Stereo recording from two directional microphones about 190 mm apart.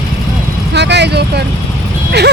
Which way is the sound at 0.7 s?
65° right (ahead or behind).